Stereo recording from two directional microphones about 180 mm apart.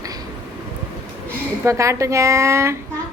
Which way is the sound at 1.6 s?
15° right (ahead or behind).